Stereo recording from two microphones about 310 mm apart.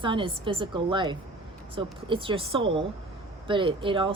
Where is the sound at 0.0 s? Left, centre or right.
Centre.